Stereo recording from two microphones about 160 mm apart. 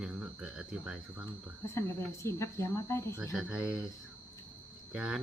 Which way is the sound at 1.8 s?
20° left (ahead or behind).